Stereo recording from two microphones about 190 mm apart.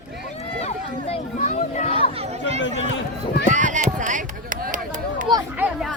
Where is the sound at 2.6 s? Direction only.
75° left (ahead or behind).